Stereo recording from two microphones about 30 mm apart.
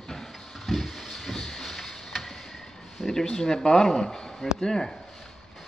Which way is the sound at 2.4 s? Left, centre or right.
Centre.